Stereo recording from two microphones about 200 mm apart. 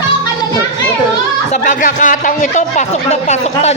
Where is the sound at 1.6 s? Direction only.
40° left (ahead or behind).